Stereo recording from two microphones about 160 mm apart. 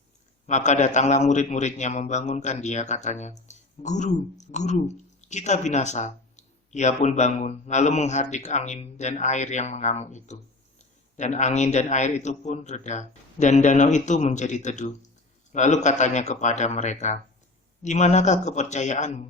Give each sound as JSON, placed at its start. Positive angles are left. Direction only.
{"t": 0.4, "sound": "a man's voice", "side_deg": 45}